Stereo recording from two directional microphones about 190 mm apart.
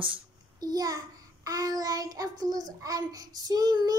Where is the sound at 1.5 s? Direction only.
20° right (ahead or behind).